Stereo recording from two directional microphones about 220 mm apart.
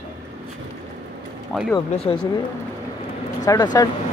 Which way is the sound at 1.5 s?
Centre (ahead or behind).